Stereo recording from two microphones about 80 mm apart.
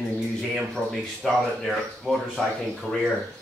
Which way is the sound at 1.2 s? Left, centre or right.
Centre.